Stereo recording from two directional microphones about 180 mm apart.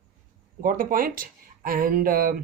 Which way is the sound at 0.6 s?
50° right (ahead or behind).